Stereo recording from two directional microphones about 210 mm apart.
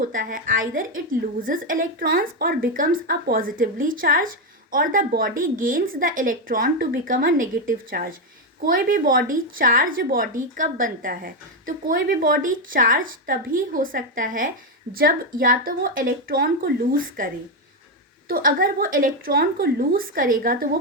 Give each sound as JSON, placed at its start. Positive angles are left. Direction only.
{"t": 0.0, "sound": "a woman's voice", "side_deg": -40}
{"t": 18.3, "sound": "a woman's voice", "side_deg": -45}